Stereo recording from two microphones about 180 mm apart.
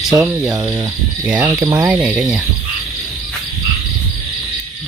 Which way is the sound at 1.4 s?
20° right (ahead or behind).